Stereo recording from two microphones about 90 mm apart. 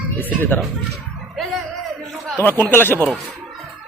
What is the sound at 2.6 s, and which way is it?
Speech, 25° left (ahead or behind).